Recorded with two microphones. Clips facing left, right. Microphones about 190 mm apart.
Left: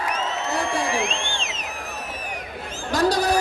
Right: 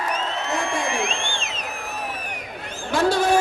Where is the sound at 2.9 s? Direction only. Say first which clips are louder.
Right 1 dB; 40° left (ahead or behind).